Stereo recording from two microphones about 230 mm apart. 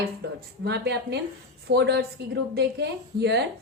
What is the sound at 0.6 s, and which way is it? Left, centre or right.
A woman's voice, right.